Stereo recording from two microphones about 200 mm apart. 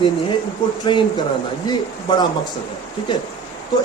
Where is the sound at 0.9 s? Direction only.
25° left (ahead or behind).